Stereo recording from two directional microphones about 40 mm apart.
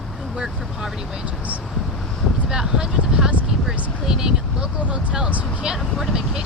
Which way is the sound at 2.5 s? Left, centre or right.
Centre.